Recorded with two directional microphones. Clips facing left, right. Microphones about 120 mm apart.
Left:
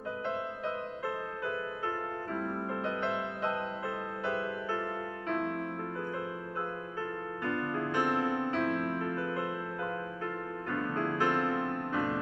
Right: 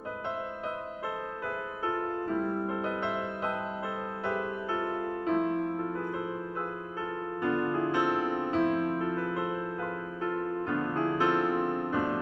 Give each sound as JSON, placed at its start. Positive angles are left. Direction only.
{"t": 2.2, "sound": "music", "side_deg": -15}
{"t": 5.3, "sound": "music", "side_deg": -20}
{"t": 7.4, "sound": "music", "side_deg": -20}